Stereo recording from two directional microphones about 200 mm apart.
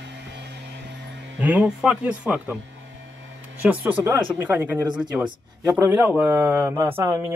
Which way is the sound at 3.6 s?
10° right (ahead or behind).